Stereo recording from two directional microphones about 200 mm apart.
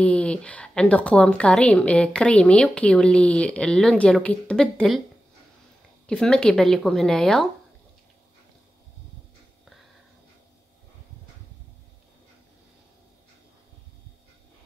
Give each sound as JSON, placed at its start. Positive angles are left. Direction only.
{"t": 0.0, "sound": "a woman's voice", "side_deg": 5}
{"t": 6.0, "sound": "a woman's voice", "side_deg": 5}